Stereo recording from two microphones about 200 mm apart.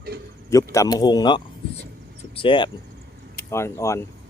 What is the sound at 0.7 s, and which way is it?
Speech, 20° left (ahead or behind).